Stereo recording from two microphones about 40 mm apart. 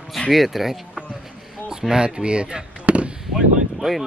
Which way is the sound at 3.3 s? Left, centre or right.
Centre.